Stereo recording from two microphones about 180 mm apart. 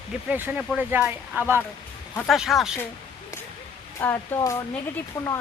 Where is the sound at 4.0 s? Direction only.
15° left (ahead or behind).